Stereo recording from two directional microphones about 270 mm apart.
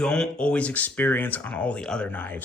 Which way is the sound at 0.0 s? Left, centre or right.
Centre.